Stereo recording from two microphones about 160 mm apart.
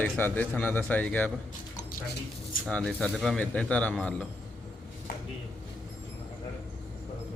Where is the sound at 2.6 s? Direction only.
5° left (ahead or behind).